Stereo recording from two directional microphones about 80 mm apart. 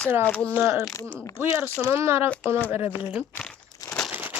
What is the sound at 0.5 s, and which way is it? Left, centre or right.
Speech, right.